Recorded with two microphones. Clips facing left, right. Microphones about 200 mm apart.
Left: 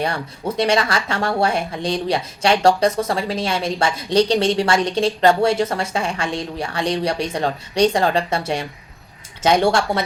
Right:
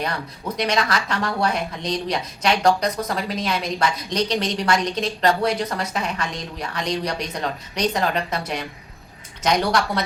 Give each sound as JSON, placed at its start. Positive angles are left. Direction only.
{"t": 0.0, "sound": "speech", "side_deg": 30}